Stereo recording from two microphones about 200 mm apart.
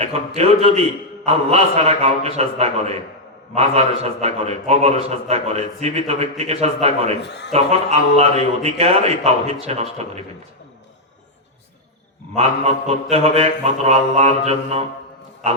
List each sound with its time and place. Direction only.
0.3 s a man's voice: 30° right (ahead or behind)
12.3 s a man's voice: 30° right (ahead or behind)